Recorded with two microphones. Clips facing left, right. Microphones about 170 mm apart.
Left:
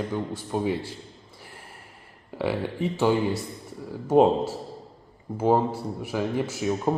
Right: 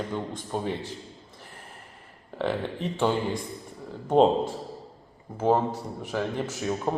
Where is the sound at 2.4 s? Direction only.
10° left (ahead or behind).